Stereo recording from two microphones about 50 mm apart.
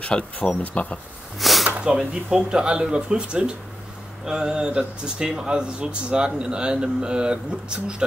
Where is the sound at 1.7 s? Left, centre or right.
Right.